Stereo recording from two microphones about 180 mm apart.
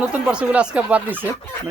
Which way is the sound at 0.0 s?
5° right (ahead or behind).